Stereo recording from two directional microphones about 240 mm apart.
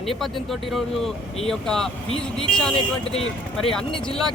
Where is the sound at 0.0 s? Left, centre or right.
Centre.